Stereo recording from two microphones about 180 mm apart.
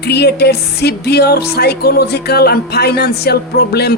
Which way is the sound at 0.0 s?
65° left (ahead or behind).